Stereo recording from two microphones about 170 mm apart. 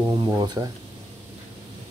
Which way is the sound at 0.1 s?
25° right (ahead or behind).